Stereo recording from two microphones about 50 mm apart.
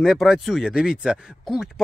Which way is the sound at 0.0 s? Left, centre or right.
Centre.